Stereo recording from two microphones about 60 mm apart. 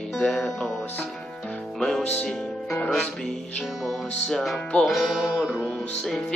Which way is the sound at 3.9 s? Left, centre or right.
Centre.